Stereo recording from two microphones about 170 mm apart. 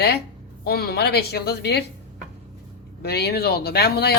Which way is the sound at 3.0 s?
70° left (ahead or behind).